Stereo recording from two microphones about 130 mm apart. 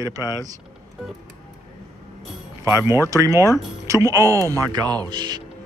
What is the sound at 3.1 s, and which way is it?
Speech, 25° right (ahead or behind).